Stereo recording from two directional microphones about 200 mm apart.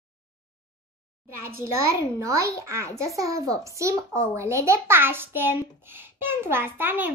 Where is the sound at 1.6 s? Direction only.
15° right (ahead or behind).